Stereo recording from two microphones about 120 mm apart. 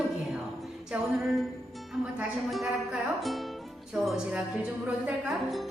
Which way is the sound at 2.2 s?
5° right (ahead or behind).